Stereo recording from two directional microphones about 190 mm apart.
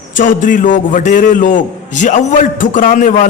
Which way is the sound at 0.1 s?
45° left (ahead or behind).